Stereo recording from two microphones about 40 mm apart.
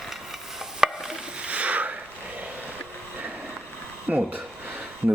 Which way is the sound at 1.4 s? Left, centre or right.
Right.